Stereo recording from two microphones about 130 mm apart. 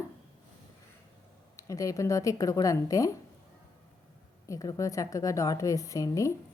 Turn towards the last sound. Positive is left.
turn(degrees=25)  # may be behind; listen again after turning